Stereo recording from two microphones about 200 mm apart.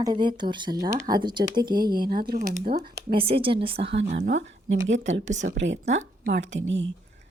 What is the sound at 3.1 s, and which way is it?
Speech, 30° right (ahead or behind).